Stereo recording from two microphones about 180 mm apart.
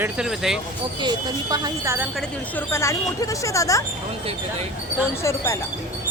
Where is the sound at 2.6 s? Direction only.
15° left (ahead or behind).